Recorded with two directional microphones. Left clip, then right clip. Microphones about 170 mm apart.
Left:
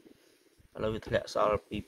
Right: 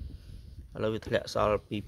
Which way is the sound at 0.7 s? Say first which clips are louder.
Right 2 dB; 30° right (ahead or behind).